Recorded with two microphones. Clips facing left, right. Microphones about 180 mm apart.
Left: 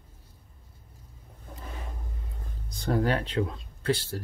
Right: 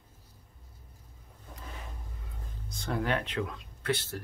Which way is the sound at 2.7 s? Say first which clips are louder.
Left 5 dB; 35° left (ahead or behind).